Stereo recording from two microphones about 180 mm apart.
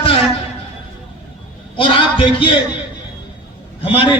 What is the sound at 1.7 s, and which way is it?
Speech, 30° left (ahead or behind).